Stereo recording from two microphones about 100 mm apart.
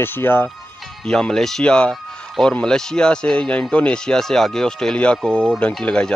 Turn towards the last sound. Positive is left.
turn(degrees=10)  # may be behind; listen again after turning